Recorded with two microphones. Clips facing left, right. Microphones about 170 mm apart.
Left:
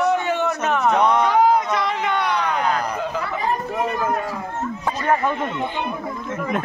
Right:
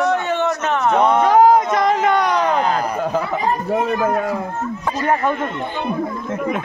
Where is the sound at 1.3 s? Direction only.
45° right (ahead or behind).